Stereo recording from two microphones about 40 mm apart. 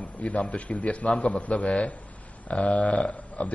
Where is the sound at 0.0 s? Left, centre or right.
Left.